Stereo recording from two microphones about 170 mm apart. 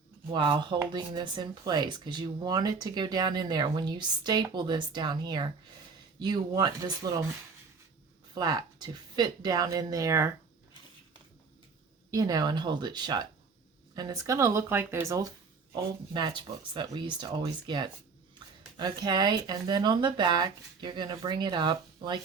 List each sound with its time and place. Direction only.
0.3 s speech: 25° right (ahead or behind)
8.4 s speech: 25° right (ahead or behind)
12.1 s speech: 20° right (ahead or behind)